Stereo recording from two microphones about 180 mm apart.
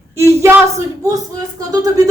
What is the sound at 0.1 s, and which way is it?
Speech, 15° right (ahead or behind).